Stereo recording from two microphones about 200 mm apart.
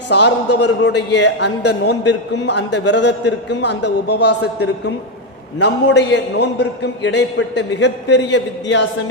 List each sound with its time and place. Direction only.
0.1 s a man's voice: 55° left (ahead or behind)